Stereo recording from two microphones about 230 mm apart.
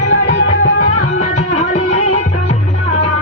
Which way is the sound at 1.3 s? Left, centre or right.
Left.